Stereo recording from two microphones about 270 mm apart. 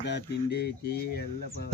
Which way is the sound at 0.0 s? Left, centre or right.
Left.